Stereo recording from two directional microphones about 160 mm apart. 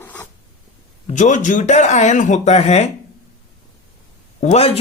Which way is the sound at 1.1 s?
50° left (ahead or behind).